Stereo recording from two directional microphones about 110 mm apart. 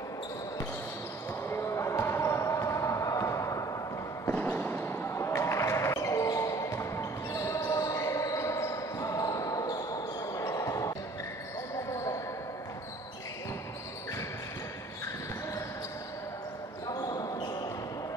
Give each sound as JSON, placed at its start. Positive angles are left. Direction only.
{"t": 1.5, "sound": "basketball bounce", "side_deg": 25}
{"t": 4.3, "sound": "basketball bounce", "side_deg": 20}
{"t": 16.8, "sound": "basketball bounce", "side_deg": 35}